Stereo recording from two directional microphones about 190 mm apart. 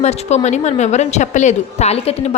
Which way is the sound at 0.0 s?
35° left (ahead or behind).